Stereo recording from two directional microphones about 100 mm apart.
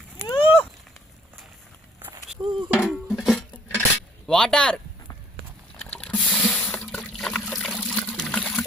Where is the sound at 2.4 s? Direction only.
25° right (ahead or behind).